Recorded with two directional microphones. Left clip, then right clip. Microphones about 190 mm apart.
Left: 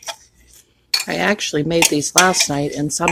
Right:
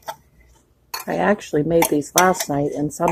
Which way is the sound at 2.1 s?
25° left (ahead or behind).